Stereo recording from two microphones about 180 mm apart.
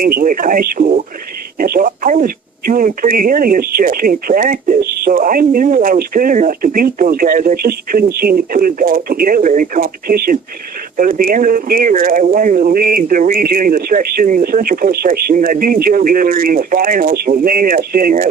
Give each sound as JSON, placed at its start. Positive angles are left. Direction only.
{"t": 0.0, "sound": "speech", "side_deg": -50}